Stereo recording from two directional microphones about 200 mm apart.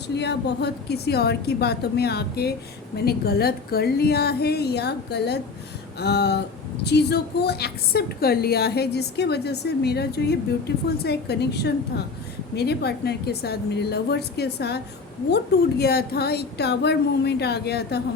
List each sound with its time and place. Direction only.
0.1 s a woman's voice: 60° left (ahead or behind)
15.8 s a woman's voice: 50° left (ahead or behind)